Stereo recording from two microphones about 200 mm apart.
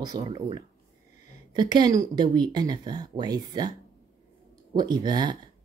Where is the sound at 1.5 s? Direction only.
20° right (ahead or behind).